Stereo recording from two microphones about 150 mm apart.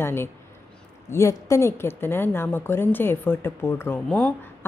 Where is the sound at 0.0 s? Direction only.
15° left (ahead or behind).